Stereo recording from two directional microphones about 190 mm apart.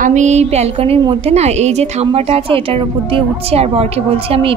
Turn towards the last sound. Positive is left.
turn(degrees=-30)  # may be behind; listen again after turning